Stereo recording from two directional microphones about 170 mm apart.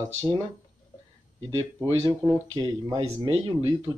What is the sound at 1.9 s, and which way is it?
Speech, 35° right (ahead or behind).